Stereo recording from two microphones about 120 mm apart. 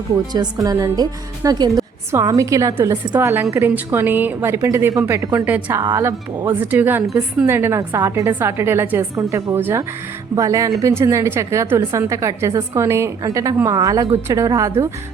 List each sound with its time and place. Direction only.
0.3 s a woman's voice: 30° right (ahead or behind)
5.5 s a woman's voice: 15° right (ahead or behind)
5.8 s a woman's voice: 25° right (ahead or behind)